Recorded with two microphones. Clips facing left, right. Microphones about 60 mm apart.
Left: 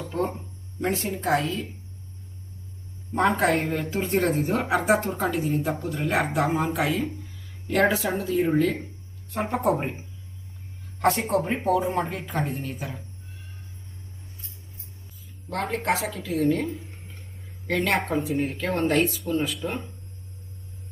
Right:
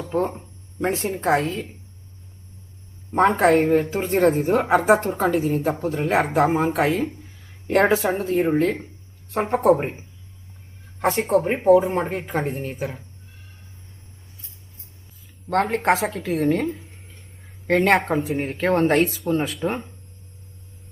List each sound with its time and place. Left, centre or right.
0.1 s speech: right
3.1 s speech: right
11.0 s speech: centre
15.4 s speech: right
16.6 s a sound: centre
17.7 s speech: right
19.3 s speech: right